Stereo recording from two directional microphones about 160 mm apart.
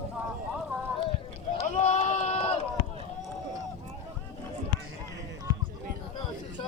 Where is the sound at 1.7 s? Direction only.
45° left (ahead or behind).